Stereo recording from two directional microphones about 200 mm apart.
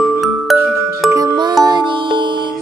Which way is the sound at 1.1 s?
20° right (ahead or behind).